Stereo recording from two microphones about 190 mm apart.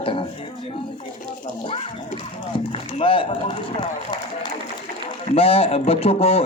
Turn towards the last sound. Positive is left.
turn(degrees=30)  # may be behind; listen again after turning